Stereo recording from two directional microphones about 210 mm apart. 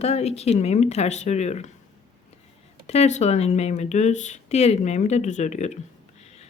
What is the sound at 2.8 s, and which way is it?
Speech, 30° left (ahead or behind).